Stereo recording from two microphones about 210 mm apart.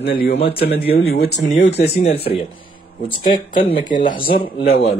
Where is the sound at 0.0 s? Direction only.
45° left (ahead or behind).